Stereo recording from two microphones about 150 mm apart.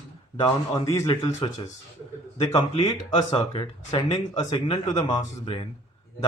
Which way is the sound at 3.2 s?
30° left (ahead or behind).